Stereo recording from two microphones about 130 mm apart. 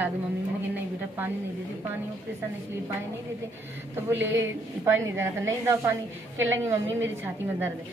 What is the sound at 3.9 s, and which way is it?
A woman's voice, 20° right (ahead or behind).